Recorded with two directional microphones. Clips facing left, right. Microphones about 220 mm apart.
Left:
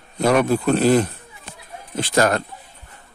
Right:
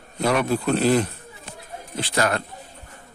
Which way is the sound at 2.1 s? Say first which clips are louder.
Left 5 dB; 45° left (ahead or behind).